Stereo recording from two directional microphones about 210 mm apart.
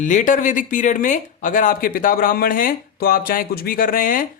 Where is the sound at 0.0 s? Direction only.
35° left (ahead or behind).